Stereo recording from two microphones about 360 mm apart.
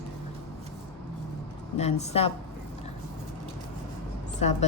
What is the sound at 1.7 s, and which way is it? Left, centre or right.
Speech, centre.